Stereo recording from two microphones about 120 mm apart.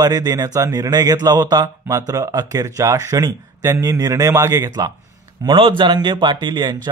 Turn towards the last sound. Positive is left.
turn(degrees=-35)  # may be behind; listen again after turning